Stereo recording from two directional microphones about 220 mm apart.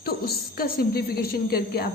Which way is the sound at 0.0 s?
45° left (ahead or behind).